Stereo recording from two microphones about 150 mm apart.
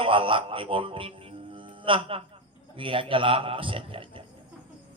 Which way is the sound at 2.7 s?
35° right (ahead or behind).